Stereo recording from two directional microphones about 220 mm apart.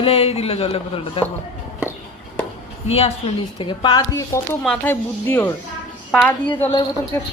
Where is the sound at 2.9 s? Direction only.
25° left (ahead or behind); by 5.5 s 10° left (ahead or behind).